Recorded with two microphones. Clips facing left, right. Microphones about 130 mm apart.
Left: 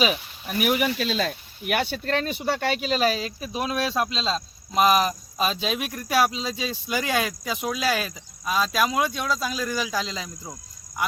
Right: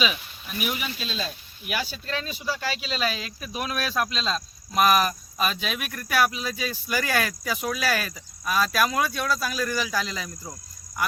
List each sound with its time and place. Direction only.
0.4 s speech: 65° left (ahead or behind); by 11.0 s 20° left (ahead or behind)